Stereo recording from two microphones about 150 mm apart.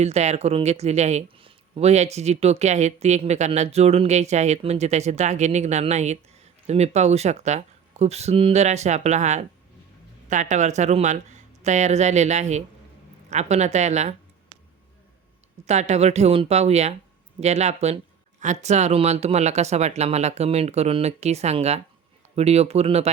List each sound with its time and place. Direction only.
0.0 s speech: 45° right (ahead or behind)
15.6 s speech: 50° right (ahead or behind)